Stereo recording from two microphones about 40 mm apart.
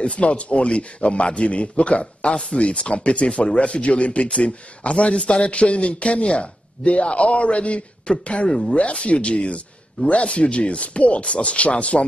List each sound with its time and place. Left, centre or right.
0.0 s speech: left
8.5 s speech: centre
8.7 s speech: left